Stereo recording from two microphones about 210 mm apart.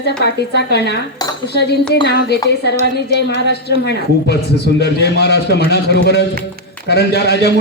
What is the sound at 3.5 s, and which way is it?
A man's voice, 50° left (ahead or behind).